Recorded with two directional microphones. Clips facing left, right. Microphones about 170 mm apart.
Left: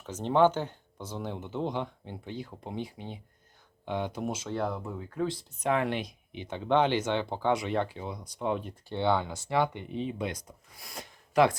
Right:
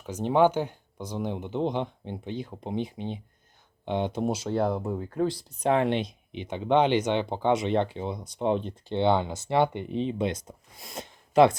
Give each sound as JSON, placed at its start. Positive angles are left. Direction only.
{"t": 0.0, "sound": "speech", "side_deg": -10}